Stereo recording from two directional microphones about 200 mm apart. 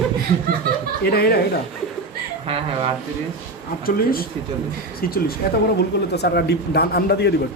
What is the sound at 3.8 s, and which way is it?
A man's voice, 45° left (ahead or behind).